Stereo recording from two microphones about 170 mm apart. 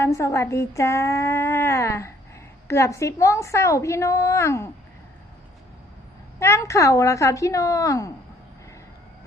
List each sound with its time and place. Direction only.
0.0 s speech: 15° left (ahead or behind)
6.4 s speech: 15° left (ahead or behind)